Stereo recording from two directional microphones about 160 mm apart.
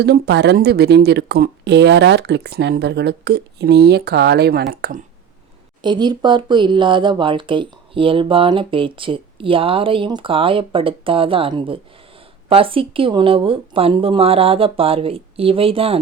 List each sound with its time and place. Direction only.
0.0 s speech: 90° right
4.7 s speech: 60° right (ahead or behind)
5.8 s speech: 30° right (ahead or behind)